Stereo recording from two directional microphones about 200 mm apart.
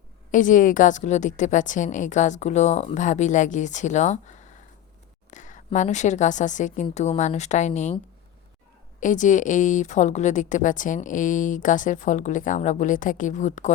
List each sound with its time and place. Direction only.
0.3 s a woman's voice: 40° left (ahead or behind)
9.0 s a woman's voice: 40° left (ahead or behind)